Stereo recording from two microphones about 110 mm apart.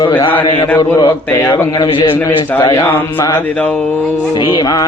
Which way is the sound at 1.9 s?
55° left (ahead or behind).